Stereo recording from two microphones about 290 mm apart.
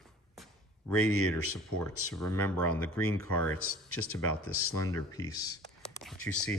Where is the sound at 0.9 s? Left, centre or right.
Left.